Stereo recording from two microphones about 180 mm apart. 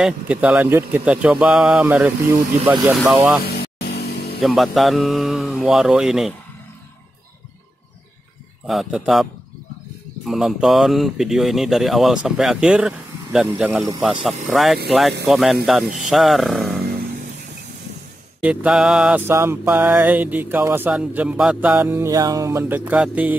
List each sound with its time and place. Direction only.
0.0 s mantra: 5° right (ahead or behind)
2.9 s speech: centre (ahead or behind)
3.5 s music: 60° left (ahead or behind)
4.4 s speech: centre (ahead or behind)
8.6 s speech: centre (ahead or behind)
18.4 s mantra: 5° right (ahead or behind)